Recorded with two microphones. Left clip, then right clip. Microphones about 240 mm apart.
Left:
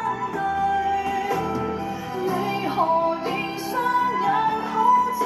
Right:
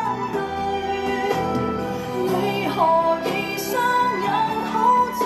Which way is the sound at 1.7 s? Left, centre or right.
Right.